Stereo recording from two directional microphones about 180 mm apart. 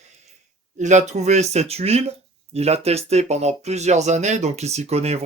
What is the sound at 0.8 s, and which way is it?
Speech, 40° right (ahead or behind).